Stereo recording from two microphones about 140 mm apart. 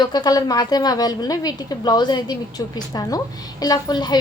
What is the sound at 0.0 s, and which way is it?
A woman's voice, 30° left (ahead or behind).